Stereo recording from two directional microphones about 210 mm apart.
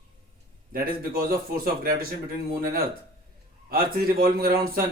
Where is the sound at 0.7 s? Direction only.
45° right (ahead or behind).